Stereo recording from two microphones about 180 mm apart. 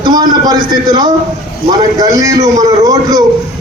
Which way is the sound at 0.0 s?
25° right (ahead or behind).